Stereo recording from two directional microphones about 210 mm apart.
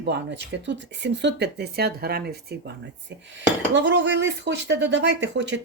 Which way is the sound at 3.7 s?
60° right (ahead or behind).